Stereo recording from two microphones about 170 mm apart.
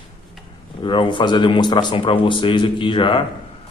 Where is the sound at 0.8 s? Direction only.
30° left (ahead or behind).